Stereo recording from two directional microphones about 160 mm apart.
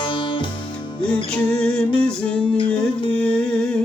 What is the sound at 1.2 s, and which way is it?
Music, 5° left (ahead or behind).